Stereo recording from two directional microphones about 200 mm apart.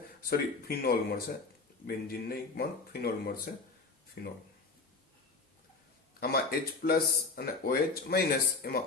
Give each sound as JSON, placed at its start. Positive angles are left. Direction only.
{"t": 0.3, "sound": "speech", "side_deg": 50}
{"t": 6.1, "sound": "speech", "side_deg": 50}